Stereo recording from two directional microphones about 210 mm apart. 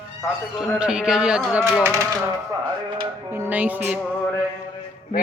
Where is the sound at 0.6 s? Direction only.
5° right (ahead or behind).